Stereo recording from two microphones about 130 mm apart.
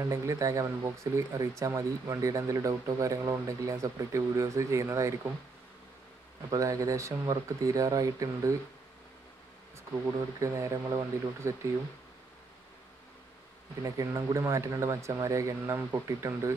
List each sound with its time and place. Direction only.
0.0 s speech: 25° right (ahead or behind)
6.5 s speech: 25° right (ahead or behind)
10.4 s speech: 25° right (ahead or behind)
13.8 s speech: 25° right (ahead or behind)